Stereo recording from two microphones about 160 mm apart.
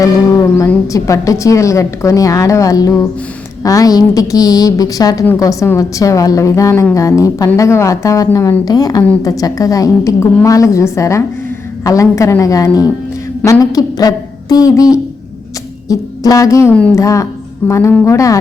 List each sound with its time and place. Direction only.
0.5 s a woman's voice: 15° left (ahead or behind)